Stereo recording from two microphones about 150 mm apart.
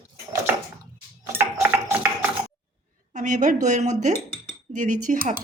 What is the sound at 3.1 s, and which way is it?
A woman's voice, 55° right (ahead or behind).